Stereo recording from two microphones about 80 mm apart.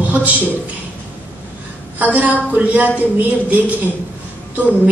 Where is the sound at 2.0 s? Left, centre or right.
Centre.